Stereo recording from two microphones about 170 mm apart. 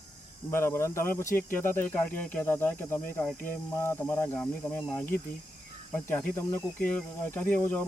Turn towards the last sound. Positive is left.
turn(degrees=10)  # may be behind; listen again after turning